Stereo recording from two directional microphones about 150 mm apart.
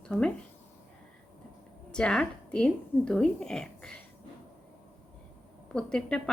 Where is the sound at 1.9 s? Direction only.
5° left (ahead or behind).